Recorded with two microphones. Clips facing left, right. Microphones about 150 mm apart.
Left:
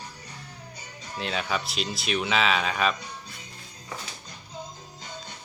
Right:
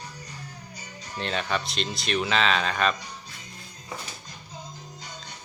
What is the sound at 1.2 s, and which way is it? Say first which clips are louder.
Speech: right 1 dB; centre (ahead or behind).